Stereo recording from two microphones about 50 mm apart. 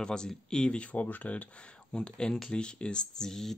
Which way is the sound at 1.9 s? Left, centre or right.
Centre.